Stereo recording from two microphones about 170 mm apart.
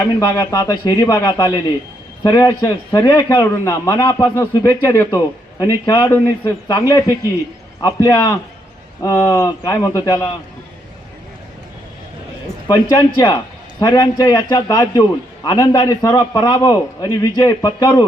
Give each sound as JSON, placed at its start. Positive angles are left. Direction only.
{"t": 0.2, "sound": "a man's voice", "side_deg": 20}
{"t": 12.6, "sound": "a man's voice", "side_deg": 25}